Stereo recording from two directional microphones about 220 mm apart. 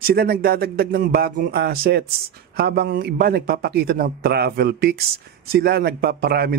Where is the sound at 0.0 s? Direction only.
45° right (ahead or behind).